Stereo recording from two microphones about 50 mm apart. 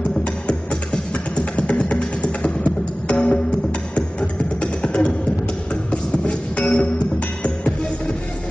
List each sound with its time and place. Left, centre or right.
0.2 s music: left